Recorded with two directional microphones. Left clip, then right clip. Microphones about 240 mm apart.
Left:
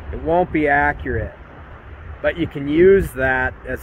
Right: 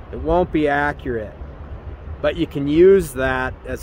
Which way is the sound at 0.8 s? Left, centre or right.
Centre.